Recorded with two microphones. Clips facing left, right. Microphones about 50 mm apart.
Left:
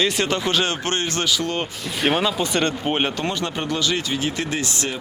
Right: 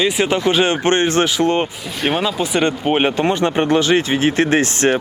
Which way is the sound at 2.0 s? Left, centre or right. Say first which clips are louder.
Right 2 dB; centre.